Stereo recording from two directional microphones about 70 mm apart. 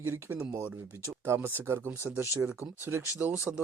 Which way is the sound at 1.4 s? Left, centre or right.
Right.